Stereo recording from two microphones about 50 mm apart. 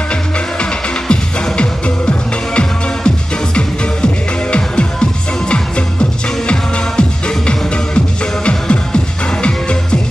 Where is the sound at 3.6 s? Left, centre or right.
Left.